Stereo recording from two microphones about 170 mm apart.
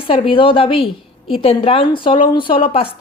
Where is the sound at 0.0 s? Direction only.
30° left (ahead or behind).